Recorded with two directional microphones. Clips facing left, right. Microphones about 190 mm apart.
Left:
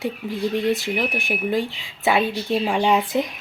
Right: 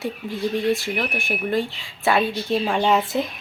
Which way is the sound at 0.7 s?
20° left (ahead or behind).